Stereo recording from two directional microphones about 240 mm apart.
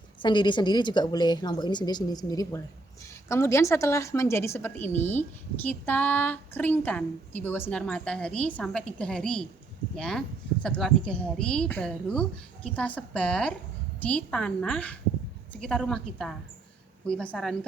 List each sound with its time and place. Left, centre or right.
0.2 s a woman's voice: centre